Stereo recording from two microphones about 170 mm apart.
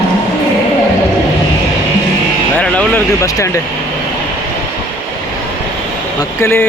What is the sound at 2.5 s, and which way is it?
Vehicle, 10° left (ahead or behind).